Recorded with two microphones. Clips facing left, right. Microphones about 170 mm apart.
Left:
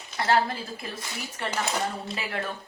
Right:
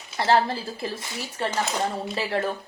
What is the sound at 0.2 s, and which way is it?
Speech, 30° right (ahead or behind).